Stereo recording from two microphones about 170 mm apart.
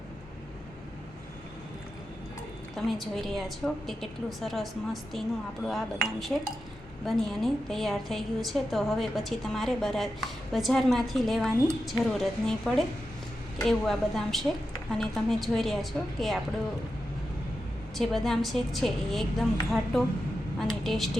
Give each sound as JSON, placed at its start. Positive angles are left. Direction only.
{"t": 2.7, "sound": "a woman's voice", "side_deg": 0}
{"t": 17.9, "sound": "a woman's voice", "side_deg": 0}